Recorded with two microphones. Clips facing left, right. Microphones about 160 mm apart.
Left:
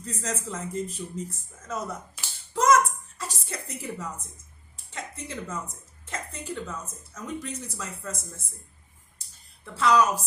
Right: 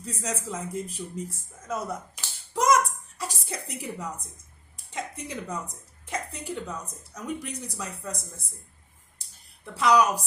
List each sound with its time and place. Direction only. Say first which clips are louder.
0.0 s a woman's voice: even; 10° right (ahead or behind)
2.2 s clapping: right 1 dB; 15° right (ahead or behind)
2.5 s music: left 1 dB; 15° right (ahead or behind)
4.9 s a woman's voice: right 3 dB; 15° right (ahead or behind)
9.7 s a woman's voice: even; 15° right (ahead or behind)